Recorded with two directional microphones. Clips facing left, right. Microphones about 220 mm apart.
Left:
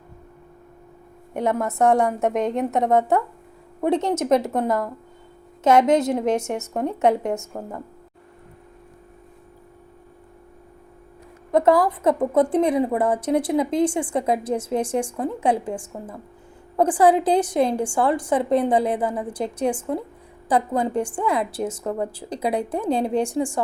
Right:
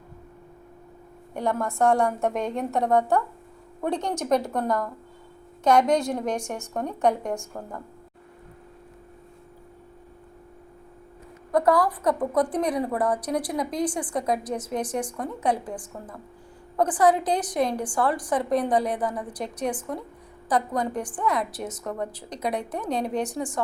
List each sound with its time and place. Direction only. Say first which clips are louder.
1.4 s a woman's voice: left 3 dB; 20° left (ahead or behind)
11.5 s a woman's voice: left 4 dB; 25° left (ahead or behind)